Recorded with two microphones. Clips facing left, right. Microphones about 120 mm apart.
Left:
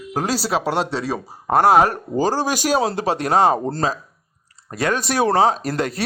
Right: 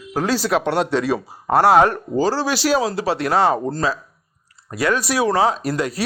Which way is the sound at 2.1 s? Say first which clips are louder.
Even; 20° left (ahead or behind).